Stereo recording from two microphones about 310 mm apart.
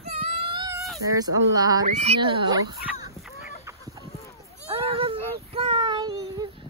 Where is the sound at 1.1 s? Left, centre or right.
Centre.